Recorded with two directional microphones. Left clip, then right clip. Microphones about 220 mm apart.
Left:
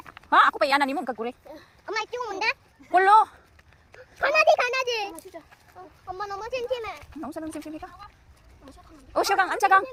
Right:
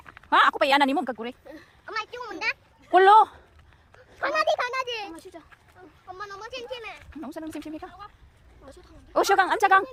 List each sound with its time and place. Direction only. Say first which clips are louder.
0.3 s a woman's voice: even; 10° right (ahead or behind)
1.8 s a sound: left 3 dB; 35° left (ahead or behind)
2.9 s a woman's voice: right 2 dB; 25° right (ahead or behind)
3.9 s a sound: left 4 dB; 40° left (ahead or behind)
6.1 s speech: left 6 dB; 25° left (ahead or behind)
7.2 s a woman's voice: left 1 dB; 10° right (ahead or behind)
7.6 s a woman's voice: even; 20° right (ahead or behind)
9.3 s a woman's voice: even; 20° right (ahead or behind)